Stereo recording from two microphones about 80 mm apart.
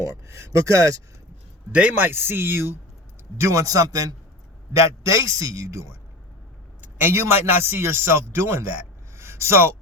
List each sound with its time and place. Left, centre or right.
0.0 s speech: right
1.7 s a man's voice: right
3.3 s a man's voice: right
7.0 s a man's voice: right
9.1 s a sound: right